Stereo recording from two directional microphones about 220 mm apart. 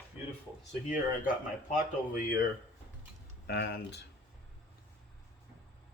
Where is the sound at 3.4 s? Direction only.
45° left (ahead or behind).